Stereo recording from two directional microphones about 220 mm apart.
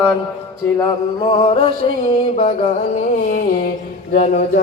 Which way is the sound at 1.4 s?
25° left (ahead or behind).